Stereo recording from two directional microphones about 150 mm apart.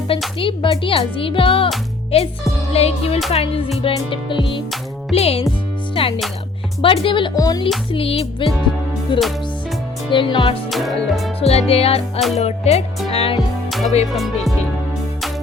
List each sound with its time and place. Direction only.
0.3 s speech: 35° left (ahead or behind)
2.7 s music: 45° left (ahead or behind)
3.3 s speech: 40° left (ahead or behind)
5.1 s music: 45° left (ahead or behind)
5.9 s speech: 35° left (ahead or behind)
7.3 s music: 25° left (ahead or behind)
7.9 s speech: 40° left (ahead or behind)
10.7 s music: centre (ahead or behind)
11.3 s speech: 40° left (ahead or behind)
12.4 s music: 45° left (ahead or behind)
13.1 s speech: 40° left (ahead or behind)
13.7 s speech: centre (ahead or behind)